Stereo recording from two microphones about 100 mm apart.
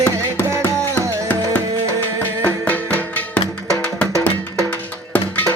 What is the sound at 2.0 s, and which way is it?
Music, 20° left (ahead or behind).